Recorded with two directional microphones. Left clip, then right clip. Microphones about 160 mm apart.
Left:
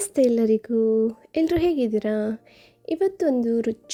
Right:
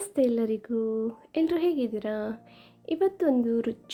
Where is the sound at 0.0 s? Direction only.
50° left (ahead or behind).